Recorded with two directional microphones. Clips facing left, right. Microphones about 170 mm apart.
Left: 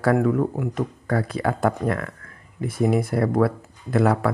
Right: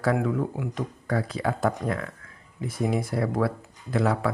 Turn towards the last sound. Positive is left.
turn(degrees=55)  # may be behind; listen again after turning